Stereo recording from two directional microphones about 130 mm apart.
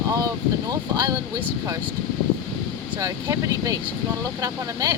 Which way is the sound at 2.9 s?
25° right (ahead or behind).